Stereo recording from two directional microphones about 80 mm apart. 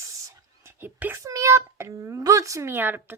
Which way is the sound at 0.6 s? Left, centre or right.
Right.